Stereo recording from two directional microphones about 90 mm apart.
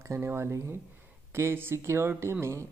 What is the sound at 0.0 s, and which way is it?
A woman's voice, 30° right (ahead or behind).